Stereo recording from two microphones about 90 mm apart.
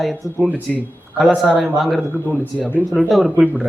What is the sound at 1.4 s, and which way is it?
Speech, 5° right (ahead or behind).